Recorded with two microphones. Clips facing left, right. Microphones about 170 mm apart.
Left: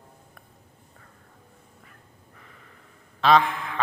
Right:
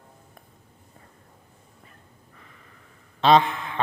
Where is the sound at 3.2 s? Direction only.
25° right (ahead or behind).